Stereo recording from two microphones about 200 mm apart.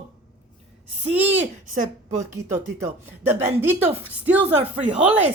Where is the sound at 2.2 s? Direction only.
15° right (ahead or behind).